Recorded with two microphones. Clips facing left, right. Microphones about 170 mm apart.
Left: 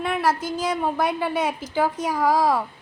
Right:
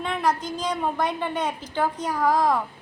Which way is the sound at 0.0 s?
5° left (ahead or behind).